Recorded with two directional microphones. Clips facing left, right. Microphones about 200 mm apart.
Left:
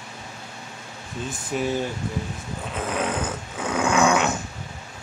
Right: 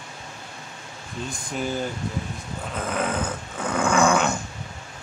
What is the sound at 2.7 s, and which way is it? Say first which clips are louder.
Dog: even; centre (ahead or behind).